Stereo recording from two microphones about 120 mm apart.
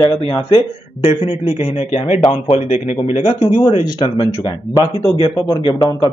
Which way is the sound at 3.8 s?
40° left (ahead or behind).